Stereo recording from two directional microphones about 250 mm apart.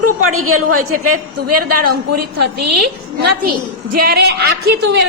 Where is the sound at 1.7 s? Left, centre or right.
Right.